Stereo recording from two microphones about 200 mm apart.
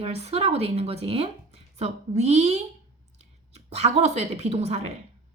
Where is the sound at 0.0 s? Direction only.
30° right (ahead or behind).